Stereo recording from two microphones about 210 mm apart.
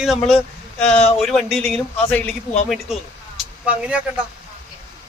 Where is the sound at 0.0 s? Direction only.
Centre (ahead or behind).